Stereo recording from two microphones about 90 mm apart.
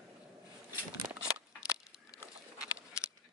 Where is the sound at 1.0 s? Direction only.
20° right (ahead or behind).